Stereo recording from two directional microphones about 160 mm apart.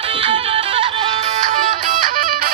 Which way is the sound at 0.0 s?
35° right (ahead or behind).